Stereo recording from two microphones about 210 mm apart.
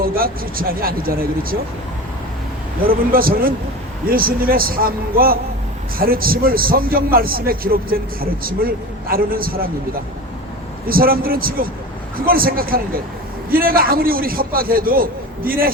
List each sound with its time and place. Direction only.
0.0 s a man's voice: 45° right (ahead or behind)
2.8 s a man's voice: 45° right (ahead or behind)
10.8 s a man's voice: 45° right (ahead or behind)